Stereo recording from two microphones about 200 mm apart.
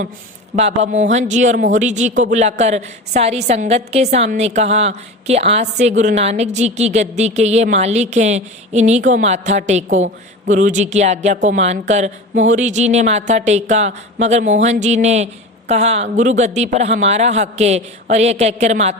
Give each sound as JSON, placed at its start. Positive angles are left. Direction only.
{"t": 0.5, "sound": "a woman's voice", "side_deg": -35}